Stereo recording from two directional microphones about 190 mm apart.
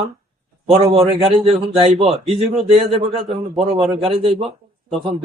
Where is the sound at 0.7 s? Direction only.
30° right (ahead or behind).